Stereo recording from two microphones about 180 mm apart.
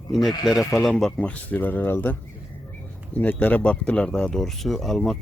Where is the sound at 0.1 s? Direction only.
Centre (ahead or behind).